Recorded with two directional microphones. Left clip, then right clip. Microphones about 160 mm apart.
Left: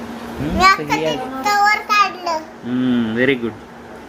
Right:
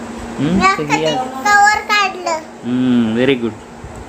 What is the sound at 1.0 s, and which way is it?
Child singing, 15° right (ahead or behind).